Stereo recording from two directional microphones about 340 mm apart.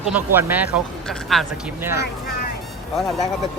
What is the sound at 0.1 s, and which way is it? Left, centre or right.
A man's voice, centre.